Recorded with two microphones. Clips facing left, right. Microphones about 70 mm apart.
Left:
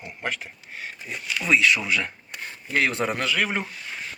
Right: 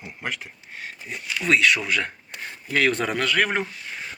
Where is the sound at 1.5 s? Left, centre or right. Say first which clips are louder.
Right 1 dB; right.